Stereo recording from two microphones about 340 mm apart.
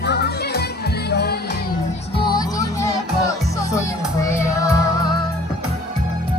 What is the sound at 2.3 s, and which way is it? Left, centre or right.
Music, centre.